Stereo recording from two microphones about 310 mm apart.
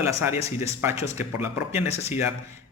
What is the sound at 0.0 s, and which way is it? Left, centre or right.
Speech, centre.